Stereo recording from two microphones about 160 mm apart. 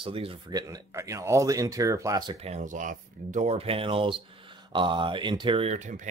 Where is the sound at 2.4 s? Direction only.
45° right (ahead or behind); by 5.7 s 30° right (ahead or behind).